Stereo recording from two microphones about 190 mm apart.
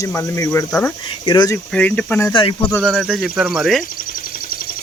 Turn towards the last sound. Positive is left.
turn(degrees=0)  # may be behind; listen again after turning